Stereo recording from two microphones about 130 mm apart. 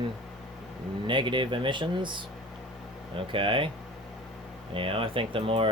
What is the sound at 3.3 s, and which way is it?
Speech, 40° right (ahead or behind).